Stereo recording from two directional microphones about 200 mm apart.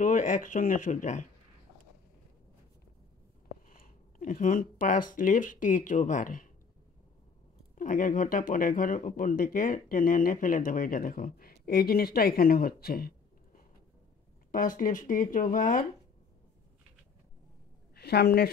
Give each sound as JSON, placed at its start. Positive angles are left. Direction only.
{"t": 0.0, "sound": "speech", "side_deg": 40}
{"t": 3.6, "sound": "speech", "side_deg": 40}
{"t": 7.7, "sound": "speech", "side_deg": 40}
{"t": 17.9, "sound": "a woman's voice", "side_deg": 55}